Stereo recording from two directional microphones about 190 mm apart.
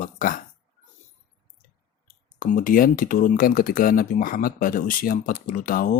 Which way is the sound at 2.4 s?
45° left (ahead or behind).